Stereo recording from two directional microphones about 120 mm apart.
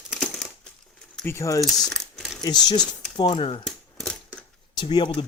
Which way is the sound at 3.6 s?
5° left (ahead or behind).